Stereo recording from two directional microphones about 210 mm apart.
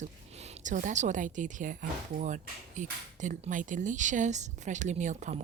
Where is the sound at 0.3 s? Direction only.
30° right (ahead or behind).